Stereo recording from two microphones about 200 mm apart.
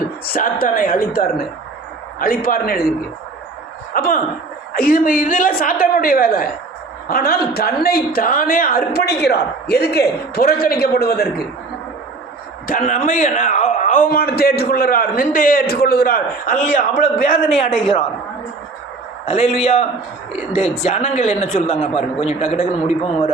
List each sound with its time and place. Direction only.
0.3 s a man's voice: 45° left (ahead or behind)
3.9 s a man's voice: 45° left (ahead or behind)
12.6 s a man's voice: 45° left (ahead or behind)
17.2 s a man's voice: 30° left (ahead or behind)
19.2 s a man's voice: 30° left (ahead or behind)
20.8 s a man's voice: 35° left (ahead or behind)